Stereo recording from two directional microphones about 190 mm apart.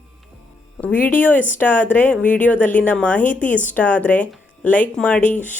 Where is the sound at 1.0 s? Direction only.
10° left (ahead or behind).